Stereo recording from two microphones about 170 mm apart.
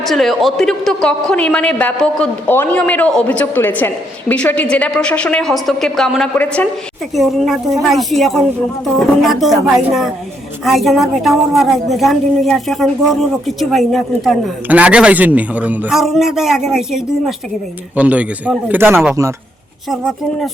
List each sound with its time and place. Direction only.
0.0 s a woman's voice: centre (ahead or behind)
7.1 s a woman's voice: centre (ahead or behind); by 19.3 s 20° right (ahead or behind)
19.9 s a woman's voice: centre (ahead or behind)